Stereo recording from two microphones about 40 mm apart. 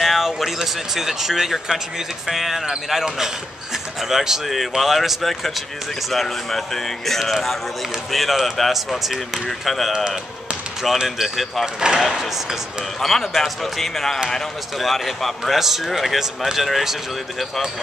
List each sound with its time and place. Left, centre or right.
0.0 s a sound: centre
0.9 s speech: centre
11.1 s speech: centre
11.6 s speech: centre
12.0 s speech: centre
13.0 s speech: centre